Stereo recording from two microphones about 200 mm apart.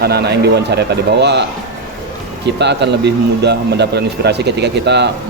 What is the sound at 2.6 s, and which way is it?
Speech, 60° right (ahead or behind).